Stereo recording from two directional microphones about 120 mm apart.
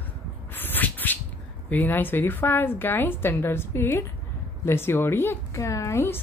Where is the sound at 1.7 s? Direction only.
15° left (ahead or behind).